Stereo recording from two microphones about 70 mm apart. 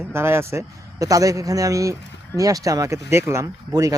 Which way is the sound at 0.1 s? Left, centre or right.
Right.